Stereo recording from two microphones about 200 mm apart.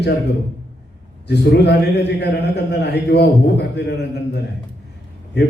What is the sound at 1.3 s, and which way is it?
A man's voice, 55° left (ahead or behind).